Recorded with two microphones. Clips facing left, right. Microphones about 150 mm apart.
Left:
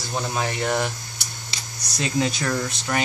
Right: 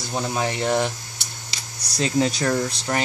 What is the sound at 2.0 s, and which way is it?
Speech, 40° right (ahead or behind).